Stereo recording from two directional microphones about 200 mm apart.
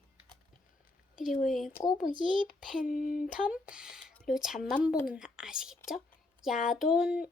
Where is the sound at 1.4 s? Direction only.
Centre (ahead or behind).